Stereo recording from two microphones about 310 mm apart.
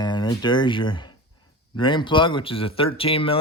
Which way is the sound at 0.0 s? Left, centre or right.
Centre.